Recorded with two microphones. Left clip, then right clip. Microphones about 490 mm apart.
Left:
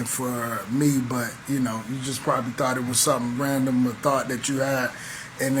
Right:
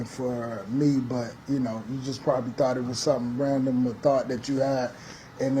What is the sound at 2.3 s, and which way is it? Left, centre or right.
A man's voice, right.